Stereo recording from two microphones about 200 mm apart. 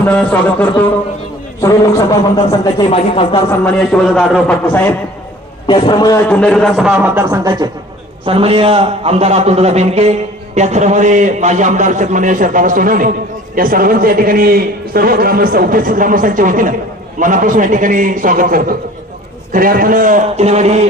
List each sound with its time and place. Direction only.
0.0 s speech: 10° left (ahead or behind)
2.5 s speech: 25° left (ahead or behind)
3.6 s a man's voice: 5° left (ahead or behind)
5.6 s speech: 25° left (ahead or behind)
6.2 s a man's voice: 5° left (ahead or behind); by 7.7 s 15° right (ahead or behind)
8.2 s a man's voice: 30° right (ahead or behind)